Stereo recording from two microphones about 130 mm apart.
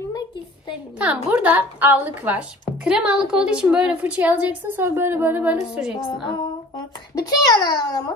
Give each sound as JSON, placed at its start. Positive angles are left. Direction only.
{"t": 0.9, "sound": "speech", "side_deg": -10}
{"t": 7.2, "sound": "a child's voice", "side_deg": 30}